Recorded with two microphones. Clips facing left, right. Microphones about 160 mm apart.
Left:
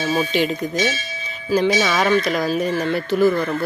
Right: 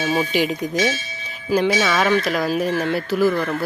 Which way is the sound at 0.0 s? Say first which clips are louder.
Even; 15° right (ahead or behind).